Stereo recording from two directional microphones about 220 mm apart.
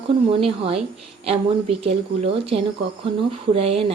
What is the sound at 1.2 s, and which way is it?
A woman's voice, 25° right (ahead or behind).